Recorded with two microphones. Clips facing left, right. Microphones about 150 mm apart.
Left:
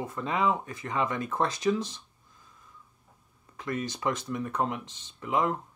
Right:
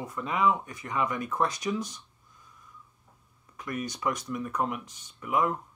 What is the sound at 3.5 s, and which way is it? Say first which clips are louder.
Speech: left 2 dB; 30° left (ahead or behind).